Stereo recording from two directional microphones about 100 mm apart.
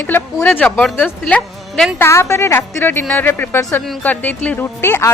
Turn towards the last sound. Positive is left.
turn(degrees=25)  # may be behind; listen again after turning